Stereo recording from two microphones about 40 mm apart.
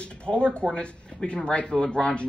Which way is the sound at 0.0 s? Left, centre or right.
Left.